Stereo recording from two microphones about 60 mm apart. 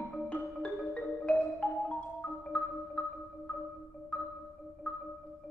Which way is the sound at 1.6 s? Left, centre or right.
Left.